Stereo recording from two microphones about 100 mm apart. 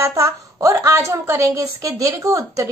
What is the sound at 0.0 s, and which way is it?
A woman's voice, 30° right (ahead or behind).